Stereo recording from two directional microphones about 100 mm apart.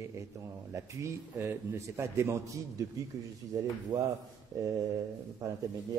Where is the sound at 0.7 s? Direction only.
25° right (ahead or behind).